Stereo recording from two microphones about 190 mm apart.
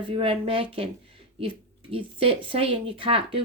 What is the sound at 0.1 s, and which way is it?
Speech, 30° right (ahead or behind).